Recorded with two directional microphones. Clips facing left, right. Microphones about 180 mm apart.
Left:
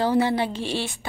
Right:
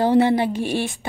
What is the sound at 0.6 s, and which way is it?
Speech, 15° right (ahead or behind).